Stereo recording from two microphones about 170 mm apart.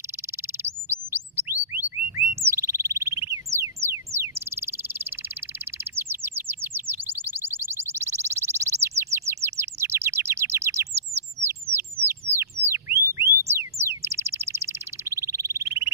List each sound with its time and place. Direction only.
0.8 s bird: 10° right (ahead or behind)
3.5 s a sound: 15° right (ahead or behind)
4.1 s bird: 15° right (ahead or behind)
5.9 s chirp: 15° right (ahead or behind)
11.0 s bird: 15° right (ahead or behind)
12.6 s a sound: 15° right (ahead or behind)